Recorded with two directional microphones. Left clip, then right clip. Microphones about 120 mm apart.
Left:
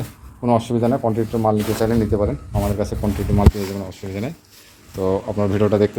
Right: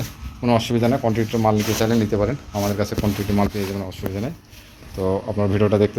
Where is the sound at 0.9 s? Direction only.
20° left (ahead or behind).